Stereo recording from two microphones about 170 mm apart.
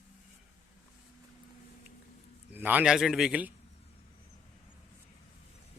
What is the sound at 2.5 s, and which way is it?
A man's voice, 10° right (ahead or behind).